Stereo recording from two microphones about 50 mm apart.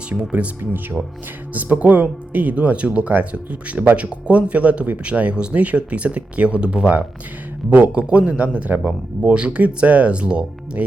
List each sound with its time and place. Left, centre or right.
0.1 s speech: right
0.6 s speech: right